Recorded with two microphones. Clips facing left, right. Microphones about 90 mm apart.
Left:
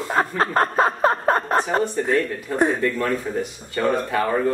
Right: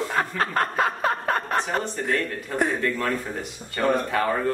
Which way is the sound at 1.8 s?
5° left (ahead or behind).